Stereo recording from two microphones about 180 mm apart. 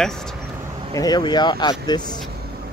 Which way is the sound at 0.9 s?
20° left (ahead or behind).